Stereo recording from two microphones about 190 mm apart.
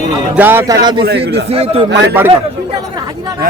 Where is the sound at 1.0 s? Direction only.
60° right (ahead or behind).